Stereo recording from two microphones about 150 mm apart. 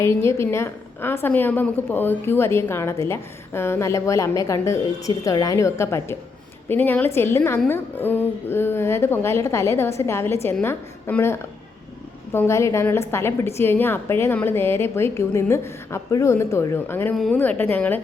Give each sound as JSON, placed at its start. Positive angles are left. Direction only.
{"t": 0.0, "sound": "a woman's voice", "side_deg": 15}